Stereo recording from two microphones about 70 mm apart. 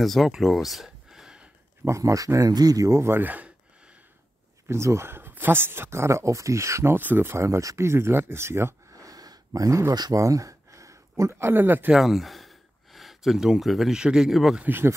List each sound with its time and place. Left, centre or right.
0.0 s a sound: centre
1.9 s speech: right
2.9 s a sound: right; by 3.9 s centre
4.6 s speech: right
7.0 s speech: right
7.4 s speech: right
8.9 s a sound: right
10.1 s speech: right
11.9 s speech: centre
14.6 s speech: right